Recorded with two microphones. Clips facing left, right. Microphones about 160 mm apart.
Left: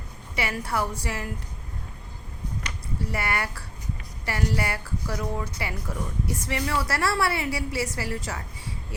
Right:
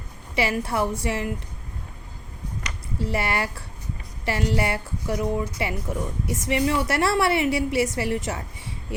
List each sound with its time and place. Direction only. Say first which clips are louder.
0.3 s a woman's voice: right 4 dB; 25° right (ahead or behind)
3.0 s a woman's voice: right 4 dB; 25° right (ahead or behind)